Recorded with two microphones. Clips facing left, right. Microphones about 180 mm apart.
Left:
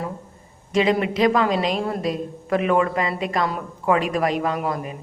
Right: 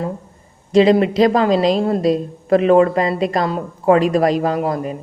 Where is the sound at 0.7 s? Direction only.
35° right (ahead or behind).